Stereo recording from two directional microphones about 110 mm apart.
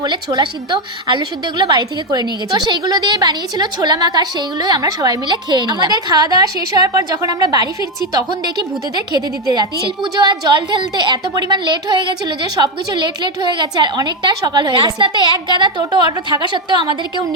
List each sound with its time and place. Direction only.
0.0 s a woman's voice: 40° right (ahead or behind)
9.0 s a woman's voice: 40° right (ahead or behind)